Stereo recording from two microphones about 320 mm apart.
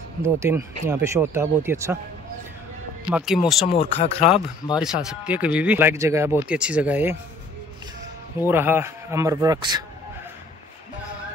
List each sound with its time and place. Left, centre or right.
0.2 s speech: centre
3.1 s speech: centre
3.6 s speech: centre
4.8 s speech: centre
8.4 s speech: centre